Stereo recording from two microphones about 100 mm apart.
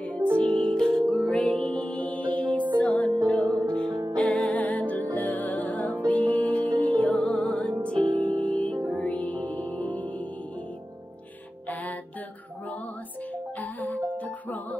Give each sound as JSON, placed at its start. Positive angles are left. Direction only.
{"t": 0.0, "sound": "music", "side_deg": 10}
{"t": 8.0, "sound": "music", "side_deg": -55}
{"t": 8.4, "sound": "music", "side_deg": 15}
{"t": 11.7, "sound": "music", "side_deg": 15}
{"t": 13.6, "sound": "music", "side_deg": 15}